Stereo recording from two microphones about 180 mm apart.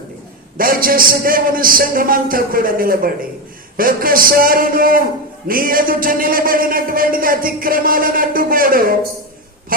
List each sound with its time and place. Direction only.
0.5 s a man's voice: 50° right (ahead or behind)